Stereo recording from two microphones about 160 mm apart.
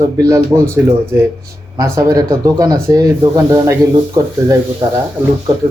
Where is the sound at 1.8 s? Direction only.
20° right (ahead or behind).